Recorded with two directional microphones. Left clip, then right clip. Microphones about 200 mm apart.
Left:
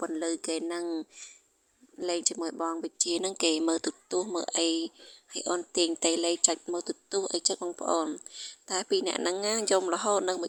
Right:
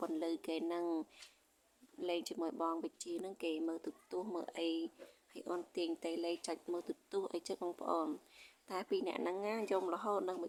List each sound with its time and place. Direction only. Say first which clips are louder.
0.0 s speech: left 8 dB; 30° left (ahead or behind)
3.1 s speech: left 14 dB; 45° left (ahead or behind)